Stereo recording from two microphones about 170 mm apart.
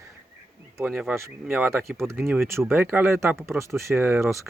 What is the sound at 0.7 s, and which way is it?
Speech, 5° right (ahead or behind).